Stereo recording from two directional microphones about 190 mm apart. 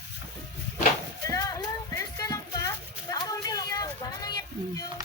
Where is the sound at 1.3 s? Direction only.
20° left (ahead or behind).